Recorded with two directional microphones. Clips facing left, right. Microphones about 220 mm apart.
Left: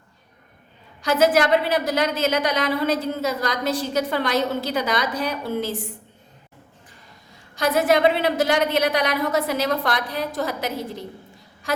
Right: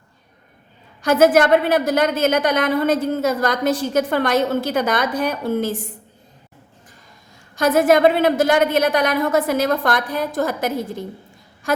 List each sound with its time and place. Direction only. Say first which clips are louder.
1.0 s a woman's voice: right 4 dB; 50° right (ahead or behind)
7.5 s a woman's voice: right 4 dB; 50° right (ahead or behind)